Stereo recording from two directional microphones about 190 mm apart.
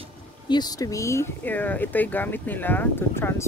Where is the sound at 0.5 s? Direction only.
20° left (ahead or behind).